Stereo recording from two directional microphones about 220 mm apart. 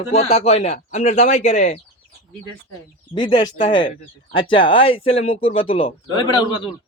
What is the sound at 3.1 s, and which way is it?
Speech, 20° left (ahead or behind).